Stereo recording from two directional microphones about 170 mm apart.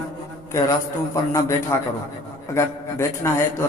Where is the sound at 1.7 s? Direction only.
15° left (ahead or behind).